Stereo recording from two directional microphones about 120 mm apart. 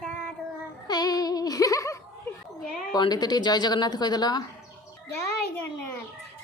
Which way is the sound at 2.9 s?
35° left (ahead or behind).